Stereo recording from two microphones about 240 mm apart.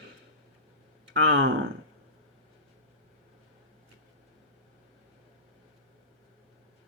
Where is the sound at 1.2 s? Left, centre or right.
Right.